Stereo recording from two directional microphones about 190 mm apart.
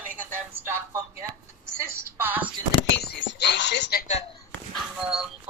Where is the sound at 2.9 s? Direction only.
65° left (ahead or behind).